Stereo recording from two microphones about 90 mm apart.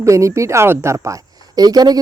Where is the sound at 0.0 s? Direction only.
35° right (ahead or behind).